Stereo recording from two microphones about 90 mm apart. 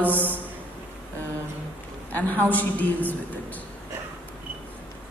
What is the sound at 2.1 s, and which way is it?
A woman's voice, 20° left (ahead or behind).